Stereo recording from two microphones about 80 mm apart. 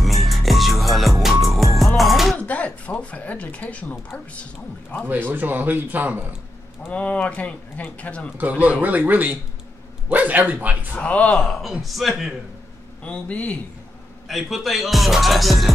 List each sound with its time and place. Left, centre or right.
0.0 s music: centre
2.3 s a sound: centre
4.1 s speech: centre
5.3 s speech: right
6.9 s speech: centre
8.4 s speech: right
10.9 s speech: centre
11.3 s speech: centre
13.0 s speech: centre
14.2 s speech: centre